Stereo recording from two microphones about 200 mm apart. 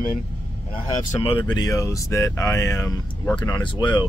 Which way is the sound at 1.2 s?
25° left (ahead or behind).